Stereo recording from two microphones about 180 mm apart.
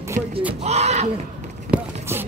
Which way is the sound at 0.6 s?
35° right (ahead or behind).